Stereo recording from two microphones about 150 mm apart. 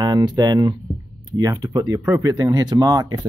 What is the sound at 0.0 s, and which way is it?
Speech, 30° right (ahead or behind).